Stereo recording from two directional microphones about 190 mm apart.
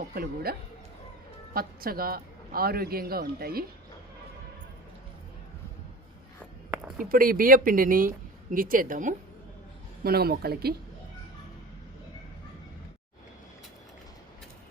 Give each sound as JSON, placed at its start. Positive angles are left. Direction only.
{"t": 0.1, "sound": "speech", "side_deg": -55}
{"t": 1.5, "sound": "speech", "side_deg": -50}
{"t": 7.0, "sound": "a woman's voice", "side_deg": -50}